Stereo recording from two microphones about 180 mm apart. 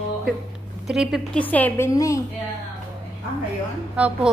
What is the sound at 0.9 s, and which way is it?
A woman's voice, centre (ahead or behind).